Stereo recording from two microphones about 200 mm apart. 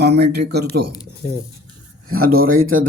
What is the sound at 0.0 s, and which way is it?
Speech, 55° right (ahead or behind).